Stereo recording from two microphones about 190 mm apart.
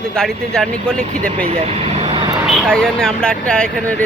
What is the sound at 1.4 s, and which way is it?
Vehicle, 30° right (ahead or behind).